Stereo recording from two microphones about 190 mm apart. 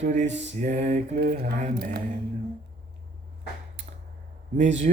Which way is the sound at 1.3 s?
40° right (ahead or behind).